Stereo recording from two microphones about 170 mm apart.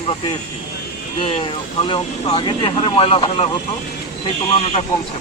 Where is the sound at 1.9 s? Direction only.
30° left (ahead or behind).